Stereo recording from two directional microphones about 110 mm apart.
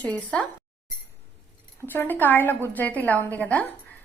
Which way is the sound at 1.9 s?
15° left (ahead or behind).